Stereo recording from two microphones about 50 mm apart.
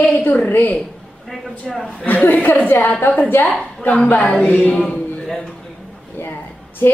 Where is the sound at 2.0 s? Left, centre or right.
Left.